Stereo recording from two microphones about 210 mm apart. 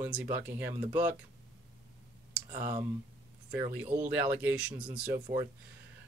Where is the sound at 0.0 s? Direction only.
10° right (ahead or behind).